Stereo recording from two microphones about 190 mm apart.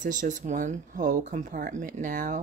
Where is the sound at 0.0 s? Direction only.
40° right (ahead or behind).